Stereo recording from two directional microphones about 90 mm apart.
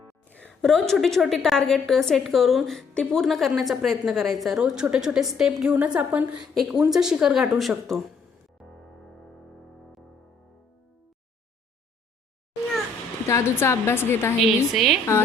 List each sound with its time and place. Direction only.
0.3 s a woman's voice: 15° left (ahead or behind); by 6.4 s 20° right (ahead or behind)
6.4 s a woman's voice: 5° right (ahead or behind)
13.2 s a woman's voice: 30° left (ahead or behind)
14.4 s a woman's voice: 5° right (ahead or behind)